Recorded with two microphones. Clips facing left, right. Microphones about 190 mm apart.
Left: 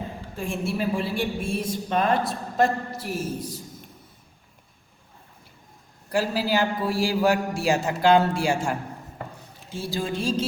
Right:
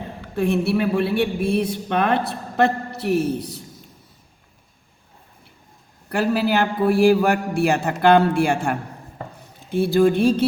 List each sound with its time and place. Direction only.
0.2 s a woman's voice: 65° right (ahead or behind)
6.1 s a woman's voice: 60° right (ahead or behind)